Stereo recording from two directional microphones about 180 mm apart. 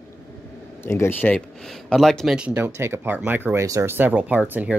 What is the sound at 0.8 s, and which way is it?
Speech, 15° left (ahead or behind).